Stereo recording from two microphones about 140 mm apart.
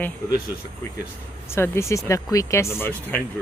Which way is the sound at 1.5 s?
15° left (ahead or behind).